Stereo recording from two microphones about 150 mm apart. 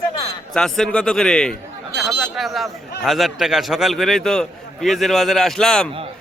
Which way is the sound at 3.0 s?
Centre (ahead or behind).